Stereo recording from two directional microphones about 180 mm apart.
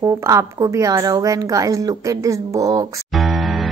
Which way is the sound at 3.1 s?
Centre (ahead or behind).